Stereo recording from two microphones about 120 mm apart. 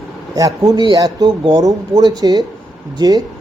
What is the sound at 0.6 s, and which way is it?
Speech, 35° right (ahead or behind).